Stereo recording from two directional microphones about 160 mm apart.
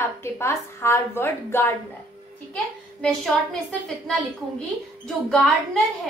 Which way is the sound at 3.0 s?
5° left (ahead or behind).